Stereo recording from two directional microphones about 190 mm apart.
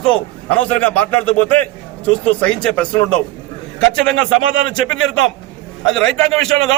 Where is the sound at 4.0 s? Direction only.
5° left (ahead or behind).